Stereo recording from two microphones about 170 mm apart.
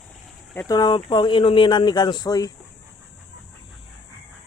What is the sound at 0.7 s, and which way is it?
Speech, 25° left (ahead or behind).